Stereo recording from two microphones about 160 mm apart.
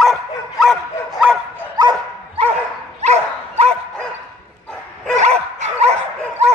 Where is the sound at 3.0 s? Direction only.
45° right (ahead or behind).